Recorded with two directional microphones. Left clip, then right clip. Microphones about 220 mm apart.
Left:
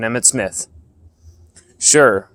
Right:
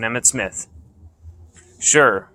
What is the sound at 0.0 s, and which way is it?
Speech, 45° left (ahead or behind).